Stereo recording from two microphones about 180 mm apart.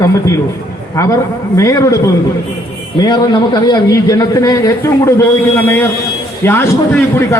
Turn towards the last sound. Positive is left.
turn(degrees=15)  # may be behind; listen again after turning